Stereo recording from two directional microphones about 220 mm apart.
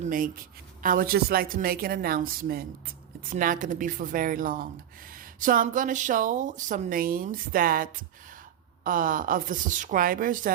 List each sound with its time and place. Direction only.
0.0 s speech: 40° right (ahead or behind)